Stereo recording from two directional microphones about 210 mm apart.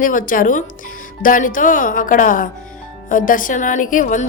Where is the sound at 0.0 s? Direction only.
40° left (ahead or behind).